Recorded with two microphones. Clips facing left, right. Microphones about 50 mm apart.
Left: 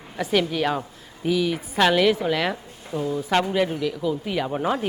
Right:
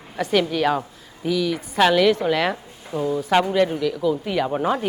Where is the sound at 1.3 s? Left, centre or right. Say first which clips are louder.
Even; centre.